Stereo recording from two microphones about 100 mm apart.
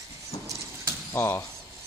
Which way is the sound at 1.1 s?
25° left (ahead or behind).